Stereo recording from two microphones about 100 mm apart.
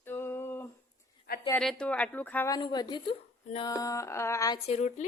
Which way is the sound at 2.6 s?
45° left (ahead or behind).